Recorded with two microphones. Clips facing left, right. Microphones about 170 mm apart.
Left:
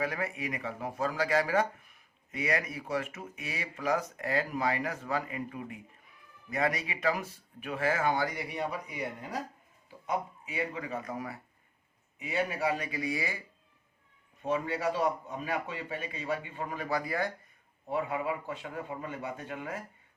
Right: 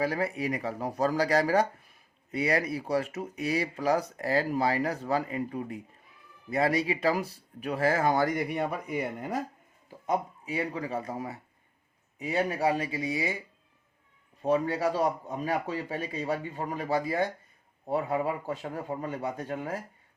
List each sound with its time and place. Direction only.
0.0 s speech: 35° right (ahead or behind); by 9.4 s 50° right (ahead or behind)
10.1 s speech: 35° right (ahead or behind)
12.2 s speech: 35° right (ahead or behind); by 13.4 s 20° right (ahead or behind)
14.4 s speech: 35° right (ahead or behind)
17.8 s speech: 40° right (ahead or behind)